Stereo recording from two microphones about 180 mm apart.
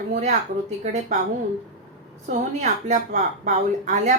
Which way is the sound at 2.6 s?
40° right (ahead or behind).